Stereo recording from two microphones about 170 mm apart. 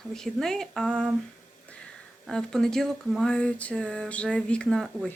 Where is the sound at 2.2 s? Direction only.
Centre (ahead or behind).